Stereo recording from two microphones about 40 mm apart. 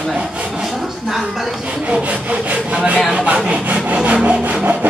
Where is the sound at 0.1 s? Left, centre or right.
Right.